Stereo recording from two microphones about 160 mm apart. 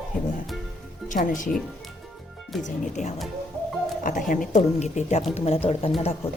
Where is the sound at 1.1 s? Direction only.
55° left (ahead or behind).